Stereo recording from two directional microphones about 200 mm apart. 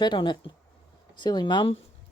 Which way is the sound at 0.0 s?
25° left (ahead or behind).